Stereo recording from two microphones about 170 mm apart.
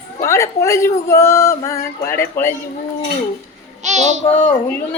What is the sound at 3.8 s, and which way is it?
Child singing, 45° right (ahead or behind).